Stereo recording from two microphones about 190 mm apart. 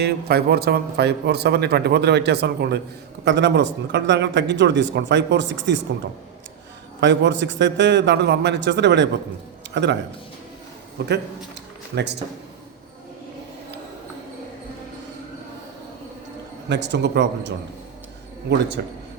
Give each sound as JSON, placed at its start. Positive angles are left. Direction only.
{"t": 0.0, "sound": "a man's voice", "side_deg": -55}
{"t": 7.0, "sound": "a man's voice", "side_deg": -70}
{"t": 16.6, "sound": "a man's voice", "side_deg": -65}